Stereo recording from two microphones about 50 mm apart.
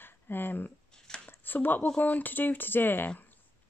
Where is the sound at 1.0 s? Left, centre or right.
Centre.